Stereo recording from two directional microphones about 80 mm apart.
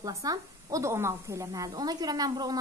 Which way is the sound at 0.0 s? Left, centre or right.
Right.